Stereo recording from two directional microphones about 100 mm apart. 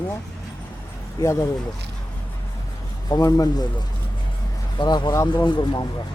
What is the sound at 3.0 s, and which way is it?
Speech, 40° left (ahead or behind).